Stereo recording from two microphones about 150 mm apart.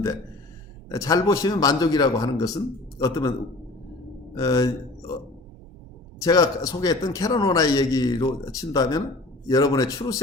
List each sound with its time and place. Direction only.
0.9 s a man's voice: 25° left (ahead or behind)
4.4 s speech: 25° left (ahead or behind)
6.1 s a man's voice: 25° left (ahead or behind)